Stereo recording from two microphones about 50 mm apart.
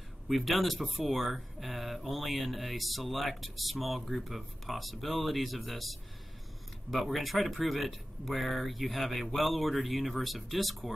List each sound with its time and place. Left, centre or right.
0.3 s speech: centre